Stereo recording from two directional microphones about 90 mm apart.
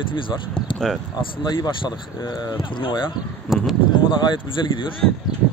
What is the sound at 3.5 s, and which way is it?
Speech, 5° right (ahead or behind).